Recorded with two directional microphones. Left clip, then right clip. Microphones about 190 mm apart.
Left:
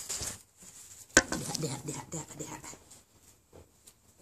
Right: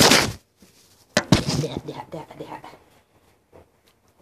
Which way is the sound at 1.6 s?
45° left (ahead or behind).